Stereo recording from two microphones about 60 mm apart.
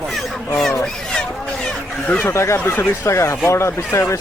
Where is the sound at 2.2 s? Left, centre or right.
Left.